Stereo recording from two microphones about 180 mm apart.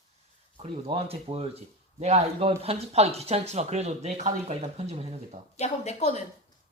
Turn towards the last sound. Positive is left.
turn(degrees=40)  # may be behind; listen again after turning